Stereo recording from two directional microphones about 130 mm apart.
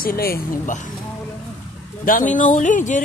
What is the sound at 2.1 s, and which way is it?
Speech, 90° left.